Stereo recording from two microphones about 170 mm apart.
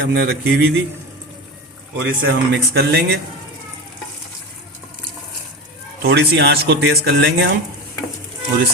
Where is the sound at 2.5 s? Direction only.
85° right.